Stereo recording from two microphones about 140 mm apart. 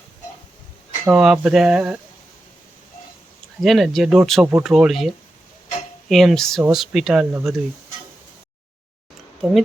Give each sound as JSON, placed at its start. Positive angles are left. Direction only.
{"t": 1.0, "sound": "speech", "side_deg": -5}
{"t": 3.6, "sound": "speech", "side_deg": 0}
{"t": 9.4, "sound": "speech", "side_deg": -5}